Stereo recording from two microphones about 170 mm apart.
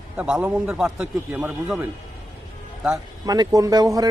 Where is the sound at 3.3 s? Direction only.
20° right (ahead or behind).